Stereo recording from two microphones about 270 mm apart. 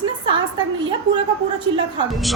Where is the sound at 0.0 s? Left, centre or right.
Centre.